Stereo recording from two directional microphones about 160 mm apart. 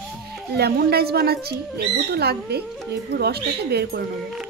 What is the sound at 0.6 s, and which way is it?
A woman's voice, 80° right.